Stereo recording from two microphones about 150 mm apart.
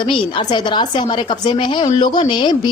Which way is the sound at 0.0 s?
30° left (ahead or behind).